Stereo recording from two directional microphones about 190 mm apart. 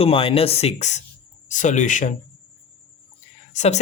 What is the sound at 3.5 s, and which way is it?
Speech, 35° left (ahead or behind).